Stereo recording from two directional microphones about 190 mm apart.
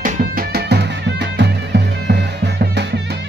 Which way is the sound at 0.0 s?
50° right (ahead or behind).